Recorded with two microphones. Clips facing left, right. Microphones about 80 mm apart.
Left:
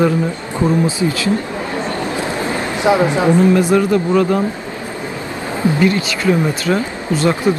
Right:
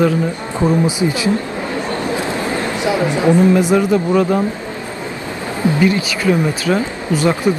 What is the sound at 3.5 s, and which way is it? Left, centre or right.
Speech, centre.